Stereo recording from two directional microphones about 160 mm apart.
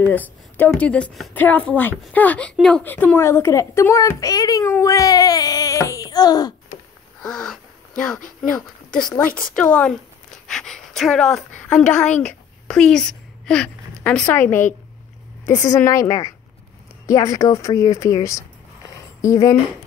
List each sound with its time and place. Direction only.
0.0 s a woman's voice: 10° left (ahead or behind)
7.2 s a sound: 5° left (ahead or behind)
8.4 s speech: 5° left (ahead or behind); by 19.5 s 20° left (ahead or behind)